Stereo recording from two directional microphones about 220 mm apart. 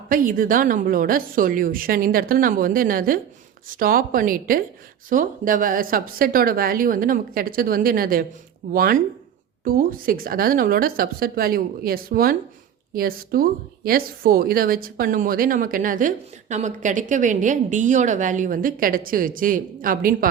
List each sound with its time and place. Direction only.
0.1 s speech: 40° right (ahead or behind)